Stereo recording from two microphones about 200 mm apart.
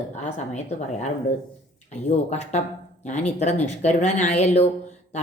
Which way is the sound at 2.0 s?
35° left (ahead or behind).